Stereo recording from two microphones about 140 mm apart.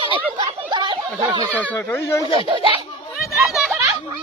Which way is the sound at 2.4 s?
40° right (ahead or behind).